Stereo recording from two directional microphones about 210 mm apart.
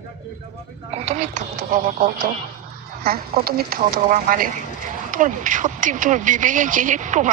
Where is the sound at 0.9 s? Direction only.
30° right (ahead or behind).